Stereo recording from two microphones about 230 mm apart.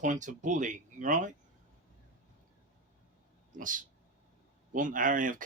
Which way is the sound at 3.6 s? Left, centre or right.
Right.